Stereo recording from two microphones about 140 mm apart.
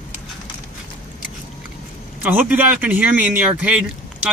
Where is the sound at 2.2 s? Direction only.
10° right (ahead or behind).